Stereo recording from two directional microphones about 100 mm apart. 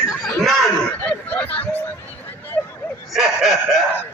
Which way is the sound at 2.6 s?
20° left (ahead or behind).